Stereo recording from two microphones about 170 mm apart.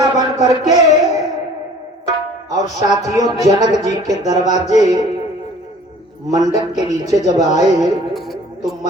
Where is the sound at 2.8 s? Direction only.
20° right (ahead or behind).